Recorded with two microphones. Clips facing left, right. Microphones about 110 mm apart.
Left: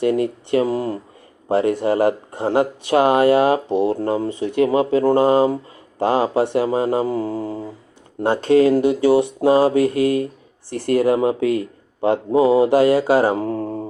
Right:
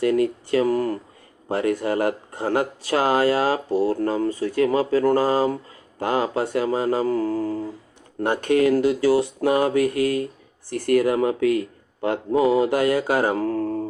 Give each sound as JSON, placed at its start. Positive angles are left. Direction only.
{"t": 0.0, "sound": "speech", "side_deg": 25}